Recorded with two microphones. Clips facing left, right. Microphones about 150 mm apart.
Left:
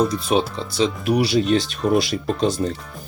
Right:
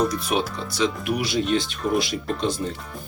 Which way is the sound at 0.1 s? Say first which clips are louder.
Left 4 dB; 30° left (ahead or behind).